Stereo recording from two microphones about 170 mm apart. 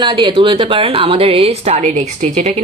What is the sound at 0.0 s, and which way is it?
Speech, 30° right (ahead or behind).